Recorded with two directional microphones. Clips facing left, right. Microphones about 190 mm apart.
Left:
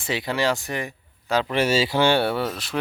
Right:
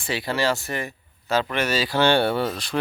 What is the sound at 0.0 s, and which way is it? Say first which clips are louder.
Speech: even; 20° left (ahead or behind).